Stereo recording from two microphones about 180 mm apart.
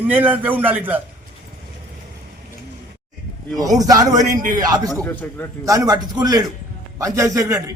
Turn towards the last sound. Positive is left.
turn(degrees=-20)  # may be behind; listen again after turning